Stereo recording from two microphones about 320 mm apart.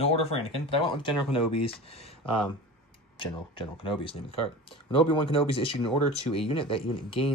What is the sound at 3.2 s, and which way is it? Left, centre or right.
Speech, centre.